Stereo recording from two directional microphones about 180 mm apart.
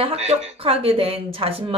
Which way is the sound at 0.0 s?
35° right (ahead or behind).